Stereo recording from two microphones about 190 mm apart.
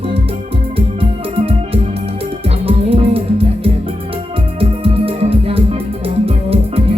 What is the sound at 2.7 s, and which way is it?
Music, 30° right (ahead or behind).